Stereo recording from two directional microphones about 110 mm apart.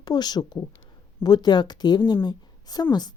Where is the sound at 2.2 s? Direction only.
35° left (ahead or behind).